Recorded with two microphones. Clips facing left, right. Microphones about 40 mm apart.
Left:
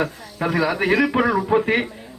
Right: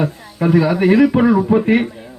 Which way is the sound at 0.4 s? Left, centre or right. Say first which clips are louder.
Right 6 dB; centre.